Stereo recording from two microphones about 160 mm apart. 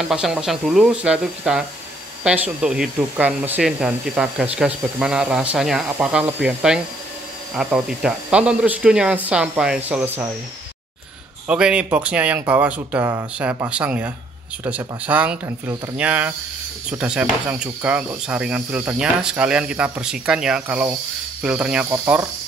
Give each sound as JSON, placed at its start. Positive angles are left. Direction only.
{"t": 0.1, "sound": "speech", "side_deg": -5}
{"t": 11.4, "sound": "speech", "side_deg": -5}
{"t": 21.8, "sound": "speech", "side_deg": -20}